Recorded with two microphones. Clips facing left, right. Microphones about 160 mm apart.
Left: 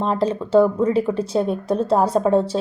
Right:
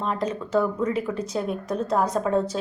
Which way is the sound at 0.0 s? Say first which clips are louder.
Left 6 dB; 30° left (ahead or behind).